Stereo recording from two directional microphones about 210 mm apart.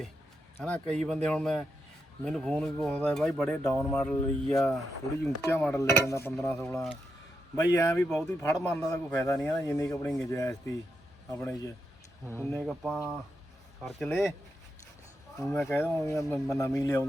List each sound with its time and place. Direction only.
0.6 s speech: centre (ahead or behind)
12.6 s speech: centre (ahead or behind)
15.4 s speech: centre (ahead or behind)
15.6 s speech: 15° left (ahead or behind)